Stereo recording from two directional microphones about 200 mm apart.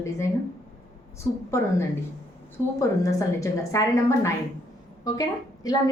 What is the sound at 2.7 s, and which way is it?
A woman's voice, 15° left (ahead or behind).